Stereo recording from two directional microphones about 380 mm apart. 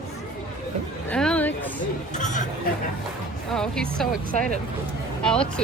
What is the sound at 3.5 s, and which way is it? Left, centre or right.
Speech, centre.